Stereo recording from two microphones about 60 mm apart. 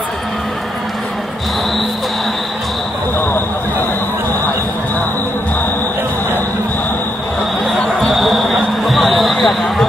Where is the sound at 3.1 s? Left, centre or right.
Left.